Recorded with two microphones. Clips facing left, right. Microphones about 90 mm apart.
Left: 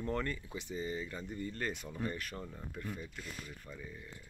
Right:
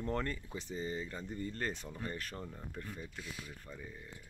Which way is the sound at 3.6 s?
25° right (ahead or behind).